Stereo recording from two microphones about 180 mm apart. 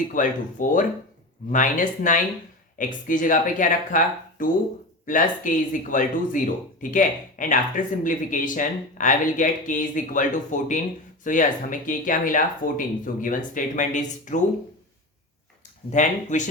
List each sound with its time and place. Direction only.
0.1 s speech: 45° left (ahead or behind)
15.9 s speech: 40° left (ahead or behind)